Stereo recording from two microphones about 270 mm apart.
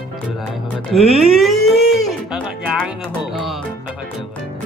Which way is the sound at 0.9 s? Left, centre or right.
Centre.